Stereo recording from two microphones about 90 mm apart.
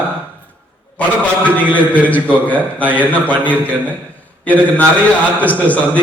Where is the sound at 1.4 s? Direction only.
15° left (ahead or behind).